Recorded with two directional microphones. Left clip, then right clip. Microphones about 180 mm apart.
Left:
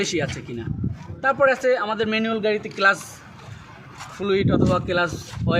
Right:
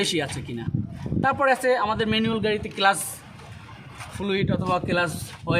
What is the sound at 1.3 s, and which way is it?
Speech, 45° right (ahead or behind).